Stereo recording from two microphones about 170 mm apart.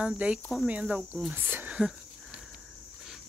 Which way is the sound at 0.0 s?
5° right (ahead or behind).